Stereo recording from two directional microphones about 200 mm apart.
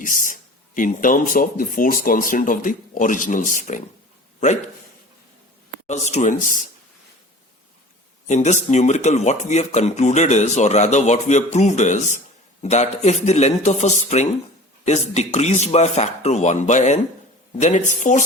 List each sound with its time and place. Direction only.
0.0 s speech: 40° left (ahead or behind)
5.9 s speech: 35° left (ahead or behind)
8.3 s speech: 35° left (ahead or behind)